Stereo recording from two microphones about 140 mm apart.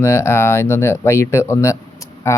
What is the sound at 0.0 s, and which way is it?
Speech, 20° left (ahead or behind).